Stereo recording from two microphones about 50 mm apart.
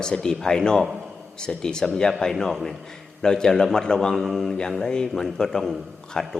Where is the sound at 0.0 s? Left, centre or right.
Centre.